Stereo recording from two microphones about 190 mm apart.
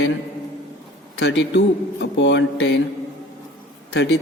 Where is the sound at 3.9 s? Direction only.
70° left (ahead or behind).